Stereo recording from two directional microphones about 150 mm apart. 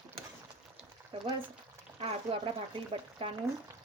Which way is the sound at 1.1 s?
40° right (ahead or behind).